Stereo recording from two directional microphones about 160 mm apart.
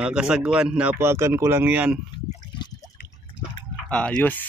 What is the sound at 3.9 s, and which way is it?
Speech, 5° left (ahead or behind).